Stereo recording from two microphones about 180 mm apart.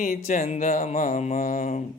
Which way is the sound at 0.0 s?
45° left (ahead or behind).